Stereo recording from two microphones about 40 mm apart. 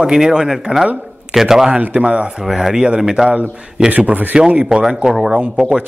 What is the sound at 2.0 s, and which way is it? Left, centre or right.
Speech, right.